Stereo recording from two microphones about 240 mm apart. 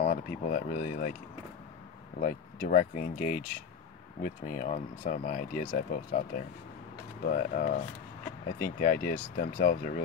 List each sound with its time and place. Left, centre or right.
0.0 s speech: left
2.1 s speech: left
7.2 s speech: left